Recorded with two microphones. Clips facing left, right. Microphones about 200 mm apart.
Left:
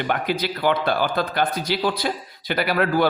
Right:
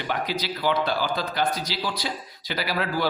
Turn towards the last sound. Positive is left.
turn(degrees=55)  # may be behind; listen again after turning